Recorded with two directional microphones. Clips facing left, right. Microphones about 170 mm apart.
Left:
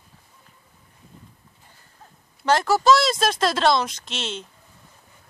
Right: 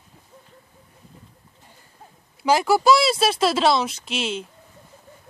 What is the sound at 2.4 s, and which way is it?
Speech, 10° right (ahead or behind).